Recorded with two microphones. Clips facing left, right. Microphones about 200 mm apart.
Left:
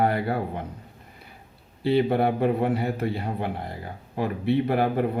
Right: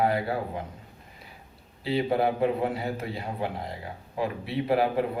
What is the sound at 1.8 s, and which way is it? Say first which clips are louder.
A man's voice: left 4 dB; 60° left (ahead or behind).